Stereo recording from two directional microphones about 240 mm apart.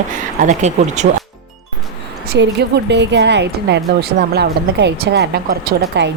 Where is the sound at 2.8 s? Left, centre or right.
Right.